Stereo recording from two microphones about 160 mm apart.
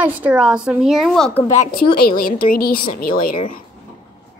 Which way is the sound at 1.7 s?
70° left (ahead or behind).